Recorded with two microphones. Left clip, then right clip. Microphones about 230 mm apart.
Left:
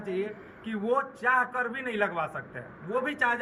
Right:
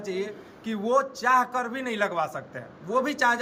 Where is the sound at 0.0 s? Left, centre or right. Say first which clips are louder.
Right 1 dB; right.